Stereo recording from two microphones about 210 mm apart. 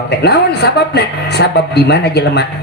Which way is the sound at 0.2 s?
50° left (ahead or behind).